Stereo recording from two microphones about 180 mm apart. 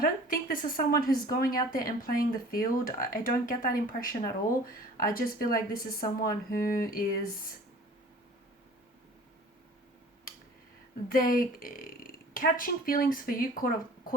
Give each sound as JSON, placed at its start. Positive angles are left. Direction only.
{"t": 0.0, "sound": "speech", "side_deg": 55}
{"t": 11.1, "sound": "speech", "side_deg": 55}